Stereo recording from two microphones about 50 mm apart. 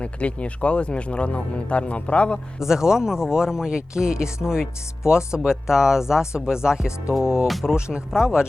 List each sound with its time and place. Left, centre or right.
0.0 s speech: left
2.6 s speech: centre